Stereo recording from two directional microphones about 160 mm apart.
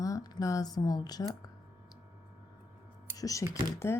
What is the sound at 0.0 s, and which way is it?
Speech, 20° left (ahead or behind).